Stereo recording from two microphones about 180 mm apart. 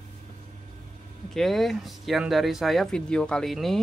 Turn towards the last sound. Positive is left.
turn(degrees=0)  # may be behind; listen again after turning